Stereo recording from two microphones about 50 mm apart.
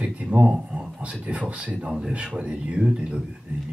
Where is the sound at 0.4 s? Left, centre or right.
Centre.